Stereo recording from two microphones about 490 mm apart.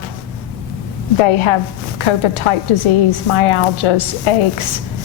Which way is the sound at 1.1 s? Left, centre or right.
Left.